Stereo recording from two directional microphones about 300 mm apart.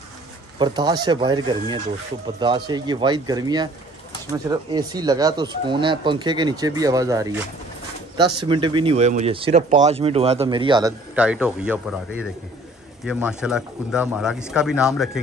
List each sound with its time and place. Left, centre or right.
0.6 s speech: centre